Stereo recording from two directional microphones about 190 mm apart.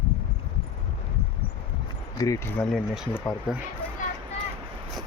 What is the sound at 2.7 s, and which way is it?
Speech, 5° right (ahead or behind).